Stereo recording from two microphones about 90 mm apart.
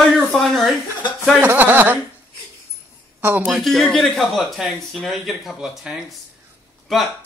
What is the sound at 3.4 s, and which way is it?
Speech, 5° left (ahead or behind).